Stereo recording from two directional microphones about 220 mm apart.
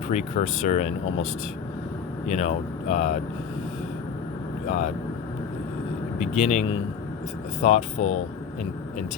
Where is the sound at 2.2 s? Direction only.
30° left (ahead or behind).